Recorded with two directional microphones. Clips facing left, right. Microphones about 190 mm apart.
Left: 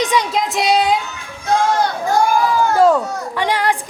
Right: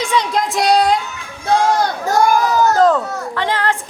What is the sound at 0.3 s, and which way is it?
Speech, centre (ahead or behind).